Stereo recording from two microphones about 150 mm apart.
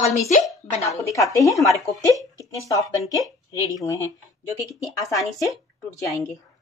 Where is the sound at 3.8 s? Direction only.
20° left (ahead or behind).